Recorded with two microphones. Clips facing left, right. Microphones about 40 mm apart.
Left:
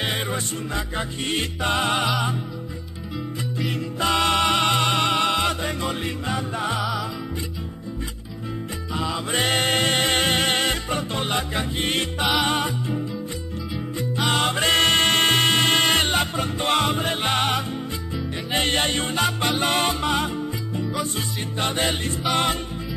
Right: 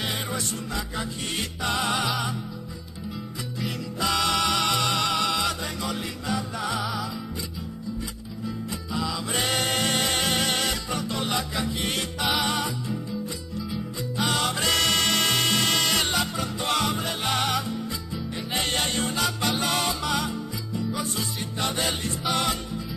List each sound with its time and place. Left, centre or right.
0.0 s music: left
4.0 s music: left
6.8 s music: centre
8.9 s music: left
14.1 s music: left